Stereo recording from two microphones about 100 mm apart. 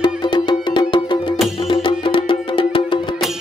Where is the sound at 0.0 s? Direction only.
50° left (ahead or behind).